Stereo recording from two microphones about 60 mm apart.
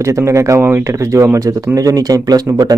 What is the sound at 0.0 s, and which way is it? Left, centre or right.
Speech, right.